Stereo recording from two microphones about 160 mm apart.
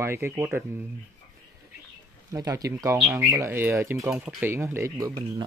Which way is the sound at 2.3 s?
20° right (ahead or behind).